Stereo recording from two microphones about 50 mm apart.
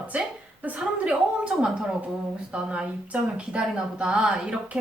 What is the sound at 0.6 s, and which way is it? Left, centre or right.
Speech, right.